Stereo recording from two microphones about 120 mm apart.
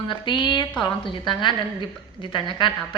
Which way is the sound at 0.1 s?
40° left (ahead or behind).